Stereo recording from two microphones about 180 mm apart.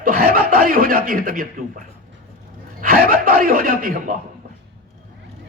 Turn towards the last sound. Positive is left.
turn(degrees=-55)  # may be behind; listen again after turning